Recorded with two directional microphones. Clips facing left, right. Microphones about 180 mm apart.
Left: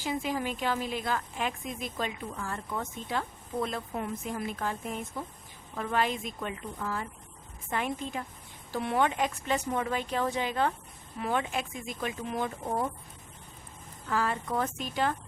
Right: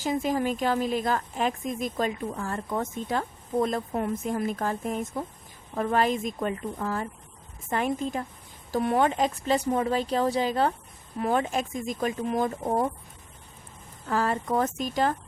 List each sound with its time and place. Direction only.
0.0 s a woman's voice: 45° right (ahead or behind)
14.1 s a woman's voice: 40° right (ahead or behind)